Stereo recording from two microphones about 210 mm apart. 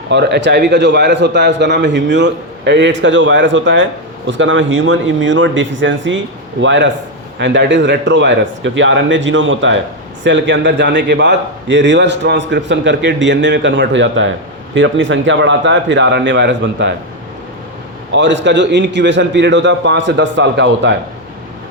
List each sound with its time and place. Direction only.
0.1 s a man's voice: 55° right (ahead or behind)
18.1 s a man's voice: 60° right (ahead or behind)